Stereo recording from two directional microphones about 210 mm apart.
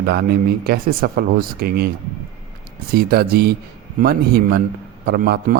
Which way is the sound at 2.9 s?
45° right (ahead or behind).